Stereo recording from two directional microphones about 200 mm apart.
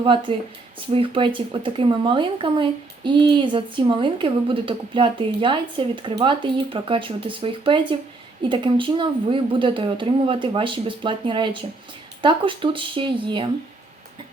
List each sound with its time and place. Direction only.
0.0 s speech: 25° right (ahead or behind)